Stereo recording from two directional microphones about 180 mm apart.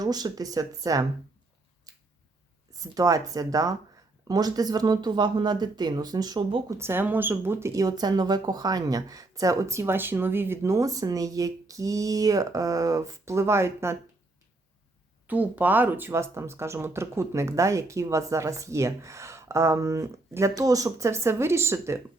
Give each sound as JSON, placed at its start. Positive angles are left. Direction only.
{"t": 0.0, "sound": "speech", "side_deg": -20}
{"t": 2.9, "sound": "speech", "side_deg": -20}
{"t": 15.3, "sound": "speech", "side_deg": -10}